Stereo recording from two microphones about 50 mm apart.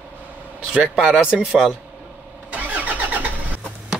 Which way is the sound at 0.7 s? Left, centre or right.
Centre.